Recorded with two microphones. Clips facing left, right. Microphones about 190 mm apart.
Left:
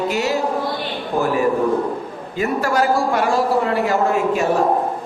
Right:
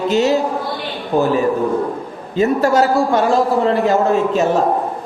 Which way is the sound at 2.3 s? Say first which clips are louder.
Right 6 dB; 25° right (ahead or behind).